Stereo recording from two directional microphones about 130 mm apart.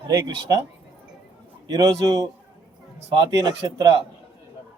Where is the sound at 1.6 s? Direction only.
25° right (ahead or behind).